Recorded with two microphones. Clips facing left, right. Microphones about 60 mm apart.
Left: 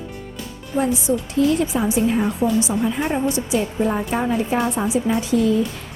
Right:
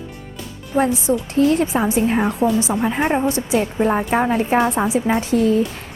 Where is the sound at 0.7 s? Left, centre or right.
Right.